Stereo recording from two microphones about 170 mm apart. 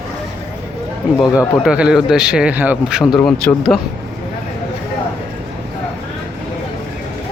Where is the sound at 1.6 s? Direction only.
5° right (ahead or behind).